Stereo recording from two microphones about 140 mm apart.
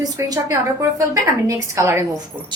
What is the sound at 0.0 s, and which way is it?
A woman's voice, 25° right (ahead or behind).